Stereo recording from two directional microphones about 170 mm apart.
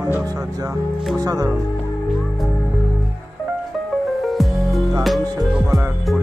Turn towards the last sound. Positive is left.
turn(degrees=-5)  # may be behind; listen again after turning